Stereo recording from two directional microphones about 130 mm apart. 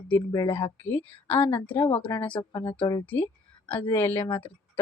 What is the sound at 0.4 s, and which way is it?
Speech, 45° left (ahead or behind).